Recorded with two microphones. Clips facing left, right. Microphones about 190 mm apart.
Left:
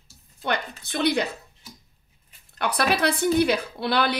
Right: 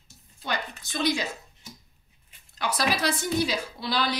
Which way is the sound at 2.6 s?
60° left (ahead or behind).